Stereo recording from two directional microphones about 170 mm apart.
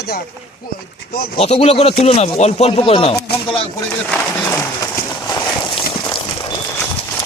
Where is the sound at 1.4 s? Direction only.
40° left (ahead or behind).